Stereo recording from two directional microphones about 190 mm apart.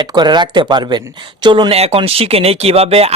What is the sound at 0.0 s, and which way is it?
Speech, 20° right (ahead or behind).